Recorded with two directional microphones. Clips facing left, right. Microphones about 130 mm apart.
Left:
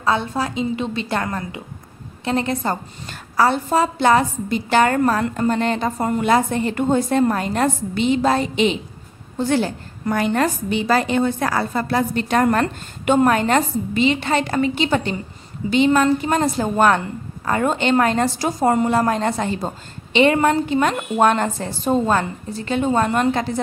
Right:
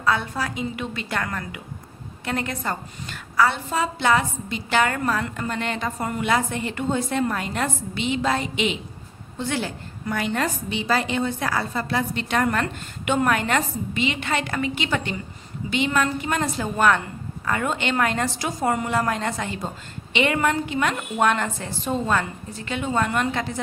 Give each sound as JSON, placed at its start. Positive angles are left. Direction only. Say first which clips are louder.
{"t": 0.0, "sound": "a woman's voice", "louder": "left 3 dB", "side_deg": 30}